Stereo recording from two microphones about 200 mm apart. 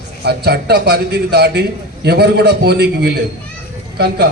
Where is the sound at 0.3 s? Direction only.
55° right (ahead or behind).